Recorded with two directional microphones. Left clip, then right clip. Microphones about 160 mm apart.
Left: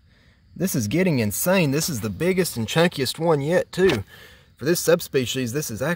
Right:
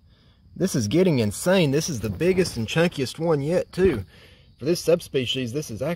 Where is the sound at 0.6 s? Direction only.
20° left (ahead or behind).